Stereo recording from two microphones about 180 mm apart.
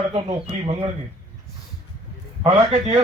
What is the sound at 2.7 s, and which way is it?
Speech, 35° right (ahead or behind).